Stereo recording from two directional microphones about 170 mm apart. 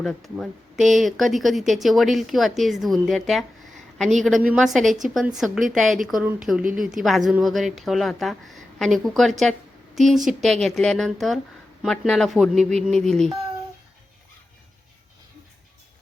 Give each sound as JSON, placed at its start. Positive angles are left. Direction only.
{"t": 0.0, "sound": "speech", "side_deg": 0}
{"t": 4.4, "sound": "speech", "side_deg": -5}